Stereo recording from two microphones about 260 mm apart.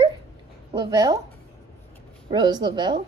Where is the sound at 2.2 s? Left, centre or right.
Centre.